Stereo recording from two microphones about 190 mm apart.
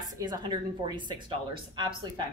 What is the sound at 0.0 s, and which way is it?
A woman's voice, 20° right (ahead or behind).